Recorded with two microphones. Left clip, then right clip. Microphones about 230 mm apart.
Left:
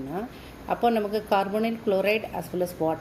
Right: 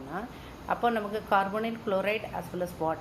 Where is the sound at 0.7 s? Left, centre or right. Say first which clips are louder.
Left 4 dB; left.